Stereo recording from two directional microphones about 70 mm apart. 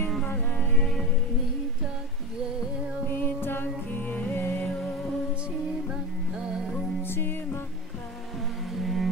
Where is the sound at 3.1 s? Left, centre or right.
Left.